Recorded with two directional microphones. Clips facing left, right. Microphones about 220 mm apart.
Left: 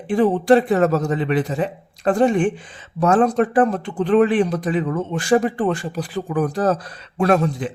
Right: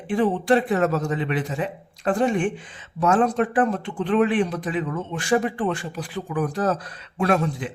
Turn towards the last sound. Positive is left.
turn(degrees=40)  # may be behind; listen again after turning